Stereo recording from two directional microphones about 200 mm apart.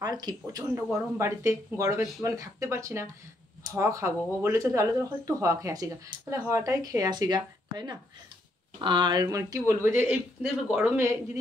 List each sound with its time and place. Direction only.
0.0 s speech: 20° right (ahead or behind)